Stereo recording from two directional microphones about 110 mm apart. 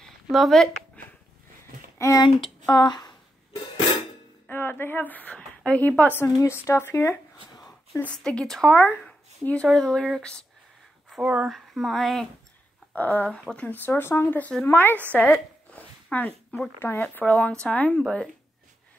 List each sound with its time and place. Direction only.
0.0 s a sound: centre (ahead or behind)
2.0 s speech: 30° left (ahead or behind)
2.7 s speech: 40° left (ahead or behind)
4.5 s speech: 20° left (ahead or behind)
7.5 s a sound: 35° left (ahead or behind)
8.0 s speech: 10° left (ahead or behind)
11.1 s a sound: 5° left (ahead or behind)
11.4 s speech: centre (ahead or behind)
12.9 s speech: 15° left (ahead or behind)